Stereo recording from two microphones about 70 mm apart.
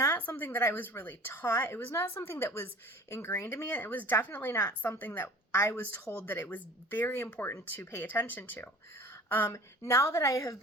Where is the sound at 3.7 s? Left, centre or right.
Left.